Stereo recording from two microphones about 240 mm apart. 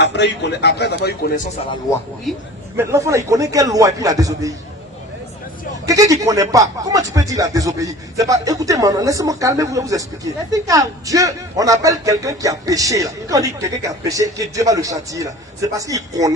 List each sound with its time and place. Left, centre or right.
0.0 s a man's voice: left
2.3 s a man's voice: centre
2.7 s a man's voice: centre
5.8 s a man's voice: centre